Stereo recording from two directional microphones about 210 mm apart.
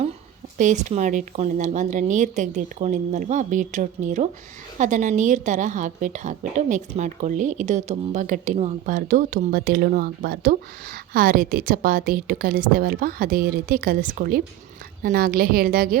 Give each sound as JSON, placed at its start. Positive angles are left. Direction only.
{"t": 0.6, "sound": "a woman's voice", "side_deg": -35}